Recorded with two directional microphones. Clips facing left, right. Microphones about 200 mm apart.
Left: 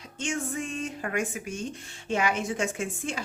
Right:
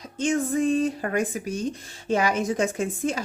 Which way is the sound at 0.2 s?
35° right (ahead or behind).